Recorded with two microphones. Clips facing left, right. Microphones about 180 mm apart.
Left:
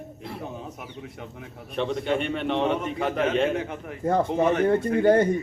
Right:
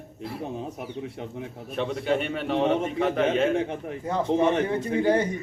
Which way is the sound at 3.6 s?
30° right (ahead or behind).